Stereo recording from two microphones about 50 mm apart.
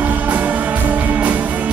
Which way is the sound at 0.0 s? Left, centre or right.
Right.